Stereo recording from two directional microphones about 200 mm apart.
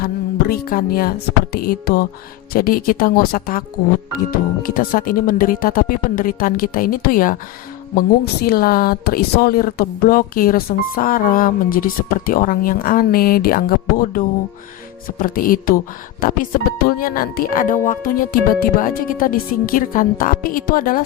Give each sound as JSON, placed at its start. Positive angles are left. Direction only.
{"t": 0.0, "sound": "speech", "side_deg": 50}